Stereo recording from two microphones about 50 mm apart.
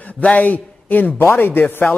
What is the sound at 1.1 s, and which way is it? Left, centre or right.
Speech, left.